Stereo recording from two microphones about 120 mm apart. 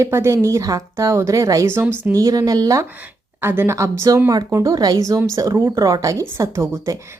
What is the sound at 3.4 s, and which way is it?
Speech, 20° right (ahead or behind).